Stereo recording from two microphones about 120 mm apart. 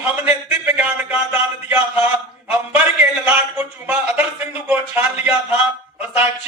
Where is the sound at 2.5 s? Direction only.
15° right (ahead or behind).